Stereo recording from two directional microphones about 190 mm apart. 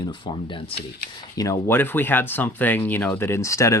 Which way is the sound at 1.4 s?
15° left (ahead or behind).